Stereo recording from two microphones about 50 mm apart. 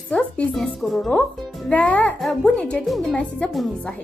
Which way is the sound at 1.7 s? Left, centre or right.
Left.